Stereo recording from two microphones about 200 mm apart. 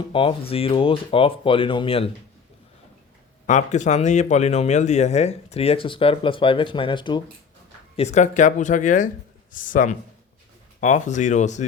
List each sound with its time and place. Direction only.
0.1 s speech: 25° left (ahead or behind)
3.4 s speech: 35° left (ahead or behind)
7.9 s speech: 35° left (ahead or behind)